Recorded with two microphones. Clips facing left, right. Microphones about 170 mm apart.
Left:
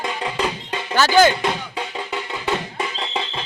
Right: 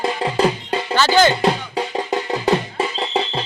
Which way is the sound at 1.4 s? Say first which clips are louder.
Right 5 dB; 35° right (ahead or behind).